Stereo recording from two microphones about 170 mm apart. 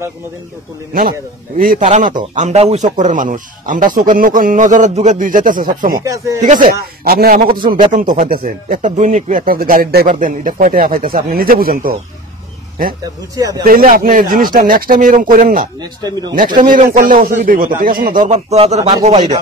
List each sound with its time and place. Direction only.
1.6 s speech: 50° right (ahead or behind)
6.0 s speech: 20° right (ahead or behind)
6.4 s speech: 50° right (ahead or behind)
13.0 s speech: 20° right (ahead or behind)
13.7 s speech: 55° right (ahead or behind)
15.8 s speech: 25° right (ahead or behind)
16.5 s speech: 50° right (ahead or behind)